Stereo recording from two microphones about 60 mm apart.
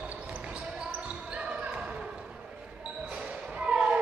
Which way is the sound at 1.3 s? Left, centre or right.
Centre.